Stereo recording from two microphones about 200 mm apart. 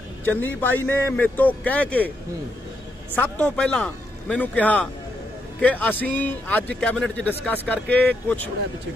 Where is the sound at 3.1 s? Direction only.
5° left (ahead or behind).